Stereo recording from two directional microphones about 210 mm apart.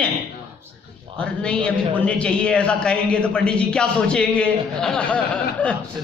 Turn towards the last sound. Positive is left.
turn(degrees=5)  # may be behind; listen again after turning